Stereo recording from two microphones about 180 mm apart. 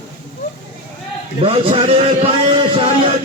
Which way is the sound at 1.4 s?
30° right (ahead or behind).